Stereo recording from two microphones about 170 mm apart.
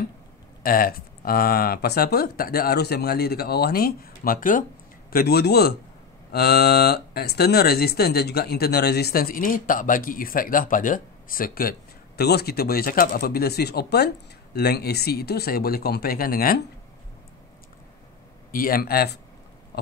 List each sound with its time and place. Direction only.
0.7 s speech: 55° left (ahead or behind)
5.1 s speech: 70° left (ahead or behind)
12.2 s speech: 70° left (ahead or behind)
18.5 s speech: 55° left (ahead or behind)